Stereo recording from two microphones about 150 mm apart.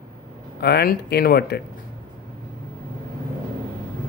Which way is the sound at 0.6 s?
90° left.